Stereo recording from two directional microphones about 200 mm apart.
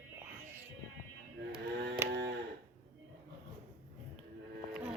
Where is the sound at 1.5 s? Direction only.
55° right (ahead or behind).